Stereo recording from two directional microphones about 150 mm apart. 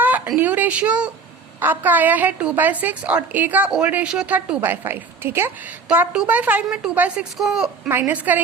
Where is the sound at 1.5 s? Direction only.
15° right (ahead or behind).